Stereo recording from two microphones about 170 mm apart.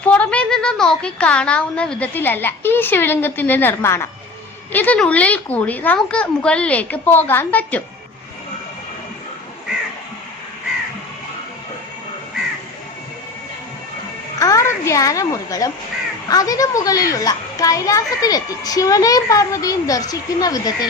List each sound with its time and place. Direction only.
0.1 s a woman's voice: 5° left (ahead or behind)
14.3 s a child's voice: 20° left (ahead or behind)